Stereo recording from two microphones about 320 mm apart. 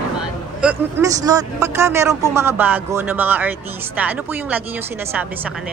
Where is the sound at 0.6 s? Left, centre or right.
Centre.